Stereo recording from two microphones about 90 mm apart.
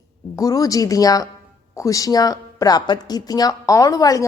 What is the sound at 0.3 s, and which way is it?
Speech, 40° left (ahead or behind).